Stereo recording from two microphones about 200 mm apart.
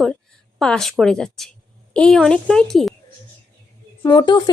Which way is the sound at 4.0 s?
15° left (ahead or behind).